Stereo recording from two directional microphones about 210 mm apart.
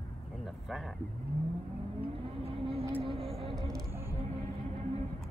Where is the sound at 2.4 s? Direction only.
25° right (ahead or behind).